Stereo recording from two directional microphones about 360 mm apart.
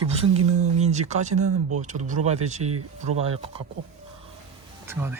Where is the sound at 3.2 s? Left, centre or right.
Centre.